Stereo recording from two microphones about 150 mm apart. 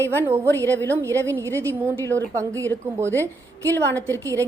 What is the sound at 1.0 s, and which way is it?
A woman's voice, 20° right (ahead or behind).